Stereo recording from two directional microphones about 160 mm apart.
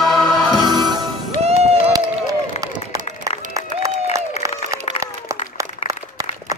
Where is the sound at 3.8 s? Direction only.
20° right (ahead or behind).